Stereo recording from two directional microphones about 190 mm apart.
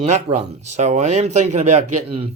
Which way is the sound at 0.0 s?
35° right (ahead or behind).